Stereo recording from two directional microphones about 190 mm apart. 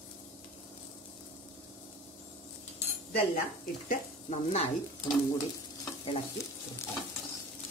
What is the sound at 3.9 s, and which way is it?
Stir, 35° left (ahead or behind).